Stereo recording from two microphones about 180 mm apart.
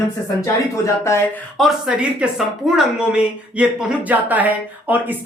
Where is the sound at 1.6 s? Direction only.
5° right (ahead or behind).